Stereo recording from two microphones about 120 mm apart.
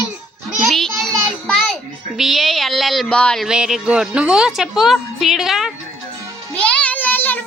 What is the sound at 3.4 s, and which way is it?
A woman's voice, 5° right (ahead or behind).